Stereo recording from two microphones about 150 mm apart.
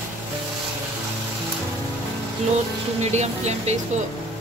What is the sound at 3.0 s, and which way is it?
Speech, 45° right (ahead or behind).